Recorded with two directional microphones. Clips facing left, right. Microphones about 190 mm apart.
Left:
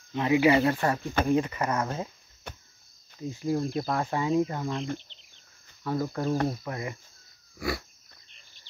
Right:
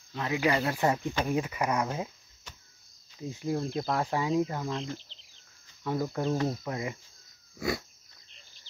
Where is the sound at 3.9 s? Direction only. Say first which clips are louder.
Left 2 dB; 10° right (ahead or behind).